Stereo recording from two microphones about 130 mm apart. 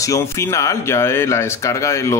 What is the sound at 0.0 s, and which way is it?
Speech, 25° left (ahead or behind).